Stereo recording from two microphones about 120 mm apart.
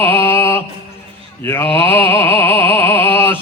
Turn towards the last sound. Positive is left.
turn(degrees=20)  # may be behind; listen again after turning